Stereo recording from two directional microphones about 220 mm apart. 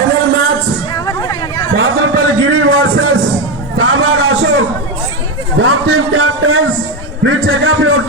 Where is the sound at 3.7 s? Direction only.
70° right (ahead or behind).